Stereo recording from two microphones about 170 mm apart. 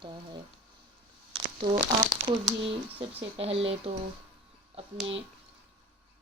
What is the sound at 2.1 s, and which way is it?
Speech, 30° right (ahead or behind).